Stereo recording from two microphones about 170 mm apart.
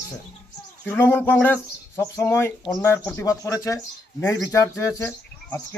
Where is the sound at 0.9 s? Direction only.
10° left (ahead or behind).